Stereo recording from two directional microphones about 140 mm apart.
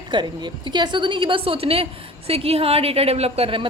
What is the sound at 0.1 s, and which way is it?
A woman's voice, 30° right (ahead or behind).